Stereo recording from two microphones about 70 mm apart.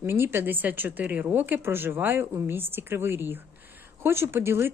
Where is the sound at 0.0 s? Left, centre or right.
Right.